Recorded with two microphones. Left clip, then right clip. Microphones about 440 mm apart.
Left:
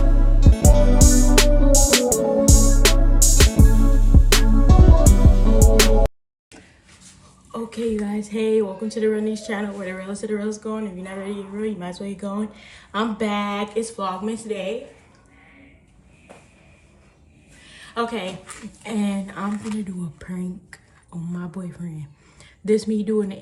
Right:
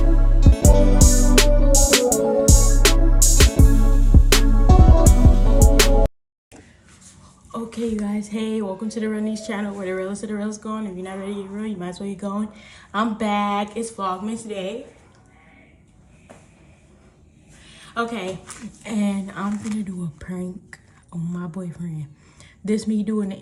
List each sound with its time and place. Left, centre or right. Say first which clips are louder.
0.0 s music: right 1 dB; centre
7.5 s speech: left 2 dB; centre
17.9 s a woman's voice: even; centre
22.6 s speech: left 4 dB; centre